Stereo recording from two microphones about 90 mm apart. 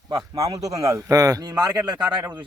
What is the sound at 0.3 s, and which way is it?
Speech, 40° right (ahead or behind).